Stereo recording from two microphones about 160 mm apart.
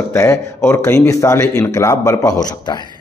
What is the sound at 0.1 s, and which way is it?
Speech, 15° left (ahead or behind).